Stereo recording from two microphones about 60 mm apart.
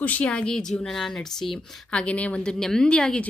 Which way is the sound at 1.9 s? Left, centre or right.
Left.